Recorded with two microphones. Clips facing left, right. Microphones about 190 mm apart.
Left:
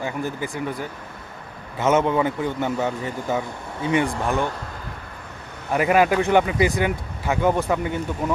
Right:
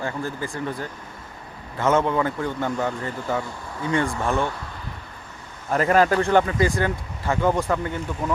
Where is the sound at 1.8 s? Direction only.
20° left (ahead or behind).